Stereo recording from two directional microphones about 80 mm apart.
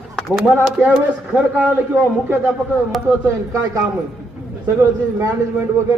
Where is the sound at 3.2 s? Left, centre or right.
Right.